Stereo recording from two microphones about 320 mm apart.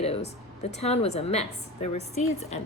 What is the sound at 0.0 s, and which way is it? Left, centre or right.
A woman's voice, centre.